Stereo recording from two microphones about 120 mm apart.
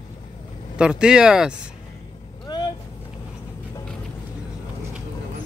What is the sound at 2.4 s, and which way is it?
Vehicle, 35° left (ahead or behind).